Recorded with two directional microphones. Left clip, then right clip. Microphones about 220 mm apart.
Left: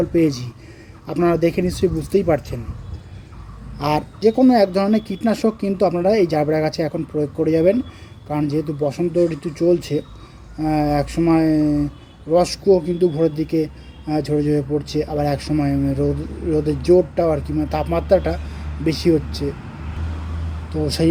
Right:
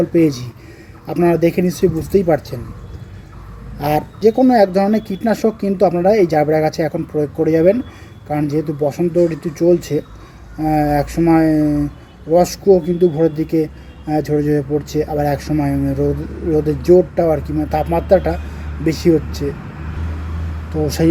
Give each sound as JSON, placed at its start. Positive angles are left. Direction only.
{"t": 0.0, "sound": "speech", "side_deg": 0}
{"t": 3.8, "sound": "speech", "side_deg": 0}
{"t": 20.7, "sound": "speech", "side_deg": 0}